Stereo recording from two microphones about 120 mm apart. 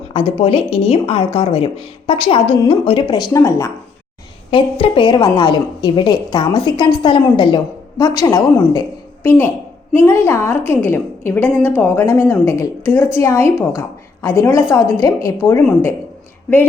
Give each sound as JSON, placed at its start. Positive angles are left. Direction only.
{"t": 0.1, "sound": "a woman's voice", "side_deg": 50}
{"t": 3.3, "sound": "a woman's voice", "side_deg": 25}
{"t": 4.5, "sound": "a woman's voice", "side_deg": 45}
{"t": 9.2, "sound": "a woman's voice", "side_deg": 20}